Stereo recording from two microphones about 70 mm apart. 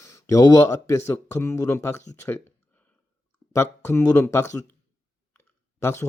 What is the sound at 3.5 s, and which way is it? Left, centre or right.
Speech, left.